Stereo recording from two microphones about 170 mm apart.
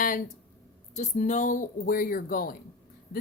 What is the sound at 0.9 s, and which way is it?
Speech, 45° left (ahead or behind).